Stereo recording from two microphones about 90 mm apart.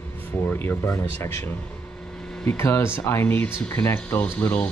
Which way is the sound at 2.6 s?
30° left (ahead or behind).